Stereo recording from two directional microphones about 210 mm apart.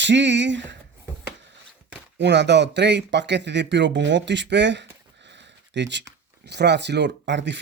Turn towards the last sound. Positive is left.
turn(degrees=-55)  # may be behind; listen again after turning